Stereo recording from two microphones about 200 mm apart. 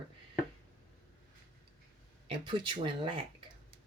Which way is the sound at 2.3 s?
25° right (ahead or behind).